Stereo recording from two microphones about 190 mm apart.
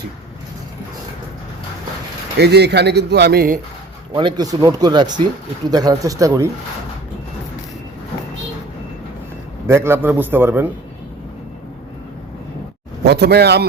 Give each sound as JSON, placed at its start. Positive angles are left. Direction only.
{"t": 2.4, "sound": "a man's voice", "side_deg": -60}
{"t": 4.1, "sound": "speech", "side_deg": -25}
{"t": 9.6, "sound": "a man's voice", "side_deg": -15}
{"t": 13.1, "sound": "a man's voice", "side_deg": -60}